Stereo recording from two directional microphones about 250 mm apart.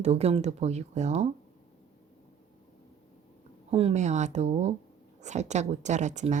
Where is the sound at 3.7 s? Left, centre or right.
Right.